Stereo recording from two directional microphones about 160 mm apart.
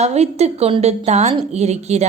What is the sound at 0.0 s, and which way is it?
A woman's voice, 40° right (ahead or behind).